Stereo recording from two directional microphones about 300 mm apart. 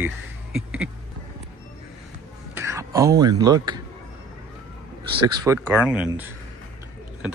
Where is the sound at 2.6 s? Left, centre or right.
Centre.